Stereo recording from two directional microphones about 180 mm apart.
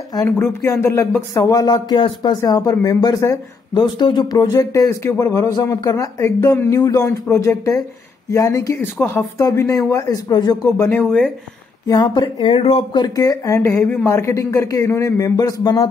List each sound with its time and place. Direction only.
0.1 s speech: 15° left (ahead or behind)
10.9 s speech: 5° left (ahead or behind)
11.9 s speech: 25° left (ahead or behind)